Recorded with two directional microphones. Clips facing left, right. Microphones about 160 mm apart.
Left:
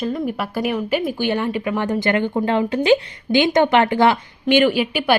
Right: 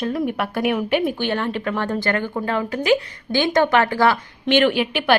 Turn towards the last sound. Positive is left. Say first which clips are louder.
# left 1 dB
turn(degrees=10)  # may be behind; listen again after turning